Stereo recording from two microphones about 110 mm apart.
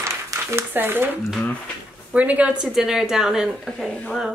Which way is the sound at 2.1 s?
10° right (ahead or behind).